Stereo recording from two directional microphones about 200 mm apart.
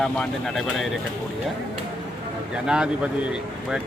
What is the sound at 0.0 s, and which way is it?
Speech, centre (ahead or behind).